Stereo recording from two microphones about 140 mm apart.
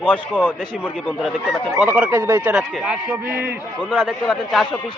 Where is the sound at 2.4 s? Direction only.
5° right (ahead or behind).